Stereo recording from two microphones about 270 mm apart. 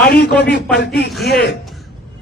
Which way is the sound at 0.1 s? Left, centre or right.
Left.